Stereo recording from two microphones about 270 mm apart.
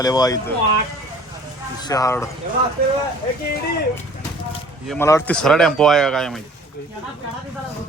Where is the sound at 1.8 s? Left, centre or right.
Centre.